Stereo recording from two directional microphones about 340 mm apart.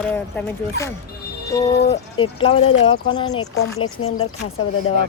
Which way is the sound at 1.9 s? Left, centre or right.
Centre.